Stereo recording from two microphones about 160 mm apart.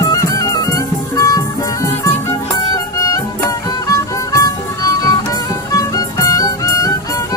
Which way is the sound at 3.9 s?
20° left (ahead or behind).